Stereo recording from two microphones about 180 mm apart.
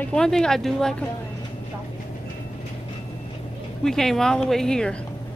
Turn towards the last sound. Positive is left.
turn(degrees=5)  # may be behind; listen again after turning